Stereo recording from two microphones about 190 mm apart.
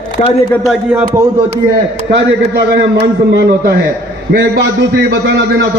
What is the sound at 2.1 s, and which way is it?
A man's voice, 65° right (ahead or behind).